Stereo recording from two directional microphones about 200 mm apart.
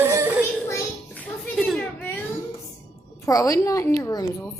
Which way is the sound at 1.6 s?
Centre (ahead or behind).